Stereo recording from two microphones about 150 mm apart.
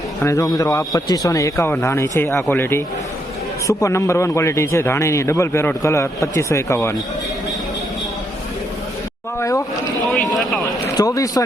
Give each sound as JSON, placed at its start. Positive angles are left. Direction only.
{"t": 0.2, "sound": "a man's voice", "side_deg": 20}
{"t": 9.4, "sound": "a man's voice", "side_deg": 20}
{"t": 10.3, "sound": "a sound", "side_deg": 0}
{"t": 10.8, "sound": "speech", "side_deg": 20}